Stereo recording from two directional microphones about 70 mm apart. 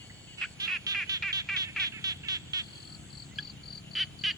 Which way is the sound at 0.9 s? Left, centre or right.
Right.